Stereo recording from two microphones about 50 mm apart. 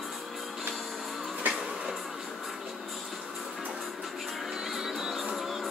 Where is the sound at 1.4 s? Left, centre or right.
Right.